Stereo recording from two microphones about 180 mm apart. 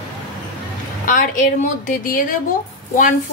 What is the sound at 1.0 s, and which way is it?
A woman's voice, 50° left (ahead or behind).